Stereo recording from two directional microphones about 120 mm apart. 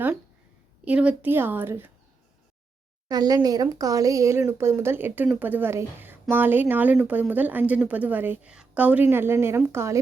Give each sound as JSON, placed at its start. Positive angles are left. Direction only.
{"t": 0.9, "sound": "a woman's voice", "side_deg": -10}
{"t": 3.1, "sound": "a woman's voice", "side_deg": -30}